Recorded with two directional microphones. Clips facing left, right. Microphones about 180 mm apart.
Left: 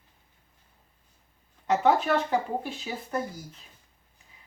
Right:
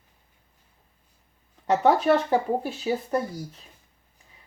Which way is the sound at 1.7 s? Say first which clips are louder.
Right 3 dB; 35° right (ahead or behind).